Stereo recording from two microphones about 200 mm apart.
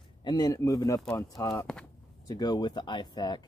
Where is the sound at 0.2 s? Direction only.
20° left (ahead or behind).